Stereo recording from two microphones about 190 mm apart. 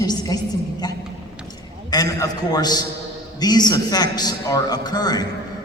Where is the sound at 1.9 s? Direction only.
20° left (ahead or behind).